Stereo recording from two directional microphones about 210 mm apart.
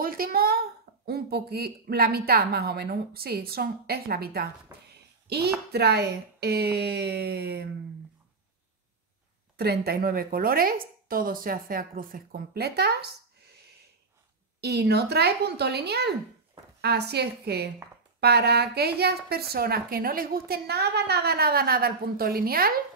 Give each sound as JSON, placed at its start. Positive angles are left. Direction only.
{"t": 0.0, "sound": "a woman's voice", "side_deg": -45}
{"t": 9.6, "sound": "a woman's voice", "side_deg": -50}
{"t": 14.6, "sound": "a woman's voice", "side_deg": -50}